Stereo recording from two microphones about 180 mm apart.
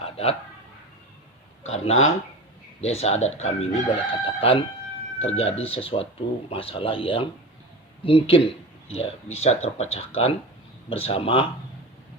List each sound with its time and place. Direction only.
0.0 s a sound: 35° left (ahead or behind)
1.9 s speech: 90° left
2.8 s speech: 35° left (ahead or behind)